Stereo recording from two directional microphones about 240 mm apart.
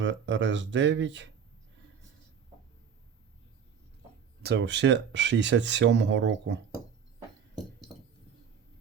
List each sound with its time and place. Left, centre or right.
0.0 s speech: right
4.4 s speech: right